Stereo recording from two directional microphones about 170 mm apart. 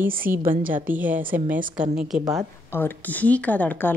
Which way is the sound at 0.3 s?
10° right (ahead or behind).